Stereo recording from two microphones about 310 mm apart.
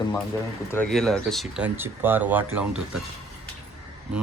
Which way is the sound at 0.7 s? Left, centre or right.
Centre.